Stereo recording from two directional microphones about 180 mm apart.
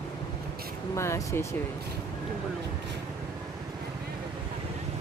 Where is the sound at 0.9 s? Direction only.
15° left (ahead or behind).